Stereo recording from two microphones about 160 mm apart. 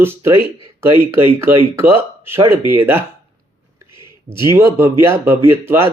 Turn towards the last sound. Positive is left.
turn(degrees=-15)  # may be behind; listen again after turning